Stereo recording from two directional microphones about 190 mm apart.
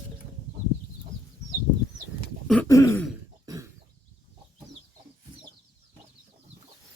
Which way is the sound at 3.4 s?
15° right (ahead or behind).